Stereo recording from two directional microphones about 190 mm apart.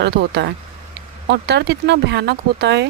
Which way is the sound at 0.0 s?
60° right (ahead or behind).